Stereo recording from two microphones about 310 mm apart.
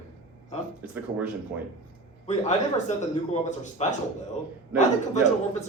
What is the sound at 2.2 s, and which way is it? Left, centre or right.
A man's voice, left.